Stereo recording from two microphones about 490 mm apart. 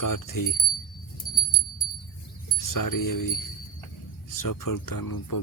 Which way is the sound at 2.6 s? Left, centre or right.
Left.